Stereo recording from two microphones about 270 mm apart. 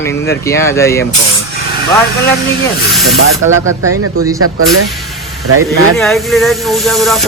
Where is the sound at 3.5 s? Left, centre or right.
Right.